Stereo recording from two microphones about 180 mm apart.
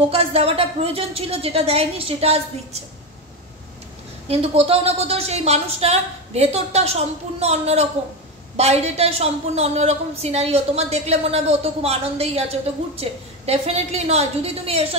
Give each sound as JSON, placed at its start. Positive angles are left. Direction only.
{"t": 0.1, "sound": "a woman's voice", "side_deg": -35}
{"t": 4.3, "sound": "a woman's voice", "side_deg": -35}